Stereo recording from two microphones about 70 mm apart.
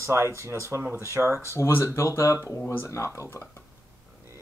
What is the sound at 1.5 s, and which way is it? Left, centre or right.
Speech, left.